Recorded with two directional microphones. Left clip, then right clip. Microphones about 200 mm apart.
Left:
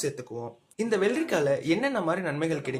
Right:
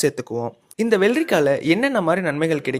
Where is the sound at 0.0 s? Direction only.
45° right (ahead or behind).